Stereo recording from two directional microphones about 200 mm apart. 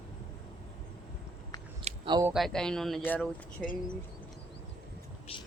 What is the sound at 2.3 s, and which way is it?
Speech, centre (ahead or behind).